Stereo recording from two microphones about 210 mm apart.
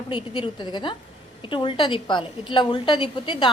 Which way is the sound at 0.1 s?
20° left (ahead or behind).